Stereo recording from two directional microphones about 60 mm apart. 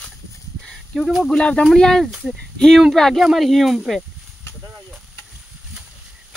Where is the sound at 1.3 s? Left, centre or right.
Centre.